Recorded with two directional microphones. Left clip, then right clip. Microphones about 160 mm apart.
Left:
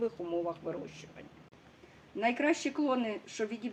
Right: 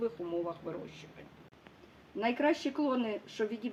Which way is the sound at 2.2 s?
35° left (ahead or behind).